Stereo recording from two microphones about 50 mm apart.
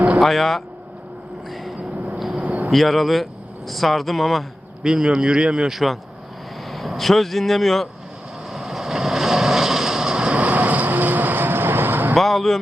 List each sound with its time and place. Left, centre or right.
0.2 s speech: centre
2.1 s vehicle: centre
2.4 s vehicle: right
2.6 s speech: centre
4.8 s speech: centre
5.7 s speech: centre
8.4 s vehicle: centre
10.3 s vehicle: right
12.1 s speech: centre